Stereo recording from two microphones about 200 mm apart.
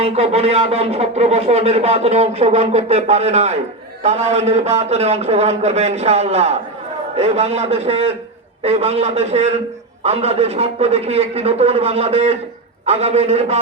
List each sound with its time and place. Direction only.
0.0 s speech: 30° right (ahead or behind)